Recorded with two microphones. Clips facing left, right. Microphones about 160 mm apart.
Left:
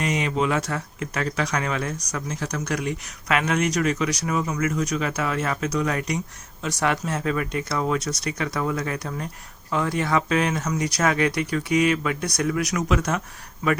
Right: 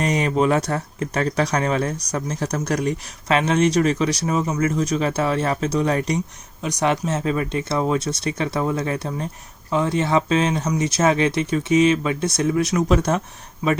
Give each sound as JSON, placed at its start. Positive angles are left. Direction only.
{"t": 0.0, "sound": "speech", "side_deg": -40}
{"t": 6.6, "sound": "speech", "side_deg": -20}